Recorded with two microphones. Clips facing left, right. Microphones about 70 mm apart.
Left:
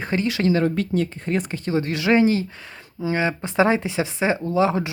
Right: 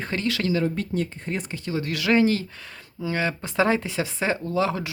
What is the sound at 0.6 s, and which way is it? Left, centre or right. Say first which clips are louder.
Speech: left 4 dB; left.